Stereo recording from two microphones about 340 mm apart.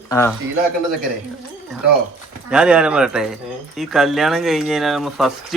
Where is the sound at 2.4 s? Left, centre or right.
Centre.